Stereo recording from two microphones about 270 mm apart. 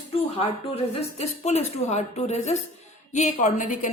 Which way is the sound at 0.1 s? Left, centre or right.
Left.